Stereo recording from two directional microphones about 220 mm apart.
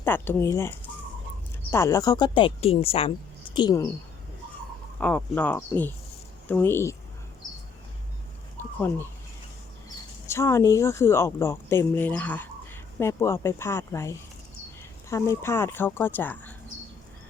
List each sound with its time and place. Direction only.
0.0 s speech: 10° left (ahead or behind)
4.9 s speech: 5° left (ahead or behind)
8.5 s a sound: 10° left (ahead or behind)
10.2 s speech: 10° left (ahead or behind)